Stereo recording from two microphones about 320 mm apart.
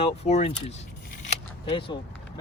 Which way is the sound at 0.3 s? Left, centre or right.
Centre.